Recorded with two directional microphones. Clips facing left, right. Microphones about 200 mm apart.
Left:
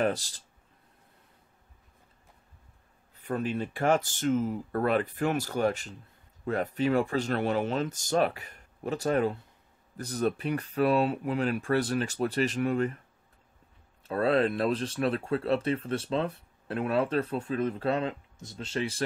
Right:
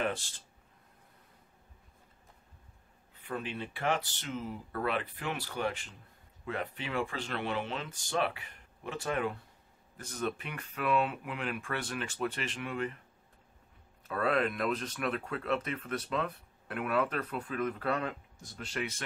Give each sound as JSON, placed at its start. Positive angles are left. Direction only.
{"t": 0.0, "sound": "a sound", "side_deg": 40}
{"t": 3.2, "sound": "speech", "side_deg": 40}
{"t": 14.0, "sound": "speech", "side_deg": 30}